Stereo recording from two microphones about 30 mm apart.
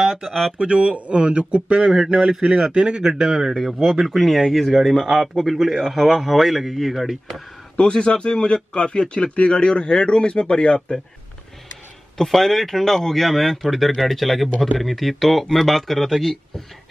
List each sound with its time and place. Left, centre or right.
0.6 s a man's voice: right
3.0 s speech: right
3.5 s speech: centre
4.9 s speech: centre
7.7 s a man's voice: left
12.2 s speech: centre